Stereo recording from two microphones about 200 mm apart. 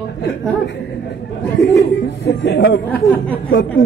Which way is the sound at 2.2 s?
60° left (ahead or behind).